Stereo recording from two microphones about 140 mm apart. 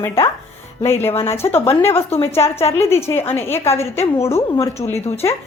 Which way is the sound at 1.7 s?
15° left (ahead or behind).